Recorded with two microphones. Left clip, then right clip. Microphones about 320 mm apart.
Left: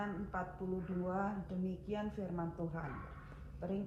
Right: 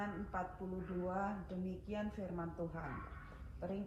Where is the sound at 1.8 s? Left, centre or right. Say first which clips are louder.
Left 2 dB; left.